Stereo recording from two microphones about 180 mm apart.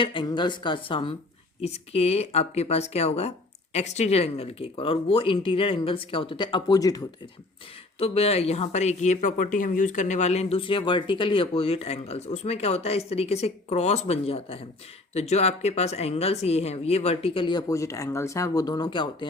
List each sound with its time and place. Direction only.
0.0 s speech: 25° left (ahead or behind)
7.9 s speech: 35° left (ahead or behind)